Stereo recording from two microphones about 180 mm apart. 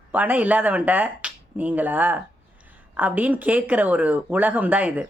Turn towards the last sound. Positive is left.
turn(degrees=-10)  # may be behind; listen again after turning